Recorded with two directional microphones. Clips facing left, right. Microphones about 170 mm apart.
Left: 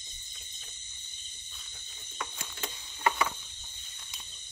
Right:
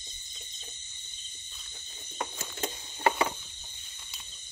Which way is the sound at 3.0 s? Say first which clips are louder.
Right 2 dB; 30° right (ahead or behind).